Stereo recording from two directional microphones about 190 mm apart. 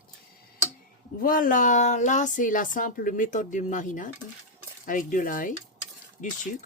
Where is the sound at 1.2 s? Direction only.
45° left (ahead or behind).